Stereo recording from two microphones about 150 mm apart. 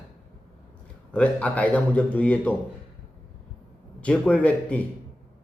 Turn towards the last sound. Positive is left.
turn(degrees=10)  # may be behind; listen again after turning